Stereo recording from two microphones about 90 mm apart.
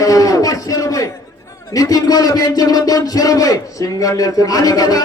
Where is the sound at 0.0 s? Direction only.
40° left (ahead or behind).